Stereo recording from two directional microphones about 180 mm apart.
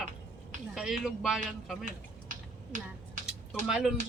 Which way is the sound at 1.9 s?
45° right (ahead or behind).